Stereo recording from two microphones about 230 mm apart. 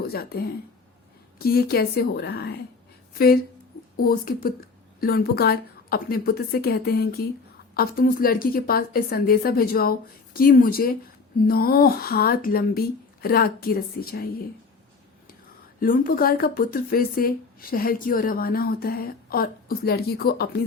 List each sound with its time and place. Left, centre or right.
0.0 s a woman's voice: left
15.8 s speech: left